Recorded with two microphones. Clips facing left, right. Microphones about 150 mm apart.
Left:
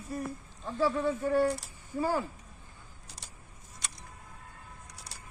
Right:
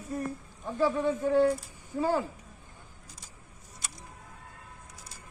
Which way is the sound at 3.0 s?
70° left (ahead or behind).